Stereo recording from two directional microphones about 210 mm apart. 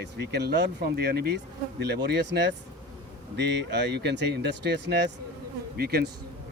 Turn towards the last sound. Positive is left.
turn(degrees=-50)  # may be behind; listen again after turning